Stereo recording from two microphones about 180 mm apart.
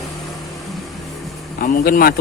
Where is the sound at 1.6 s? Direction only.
55° left (ahead or behind).